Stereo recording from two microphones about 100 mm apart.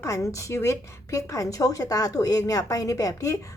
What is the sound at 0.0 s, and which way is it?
A woman's voice, 30° left (ahead or behind).